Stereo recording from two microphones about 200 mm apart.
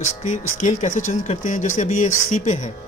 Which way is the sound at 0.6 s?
40° left (ahead or behind).